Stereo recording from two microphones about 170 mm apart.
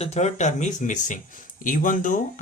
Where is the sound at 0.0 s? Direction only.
40° left (ahead or behind).